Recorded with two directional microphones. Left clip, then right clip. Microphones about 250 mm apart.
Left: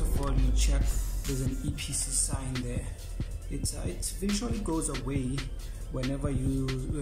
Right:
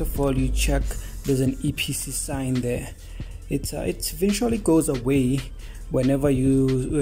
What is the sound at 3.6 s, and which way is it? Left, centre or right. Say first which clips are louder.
Speech: right 10 dB; right.